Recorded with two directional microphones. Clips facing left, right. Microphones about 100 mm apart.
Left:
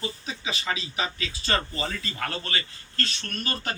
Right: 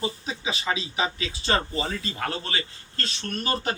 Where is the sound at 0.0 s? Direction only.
25° right (ahead or behind).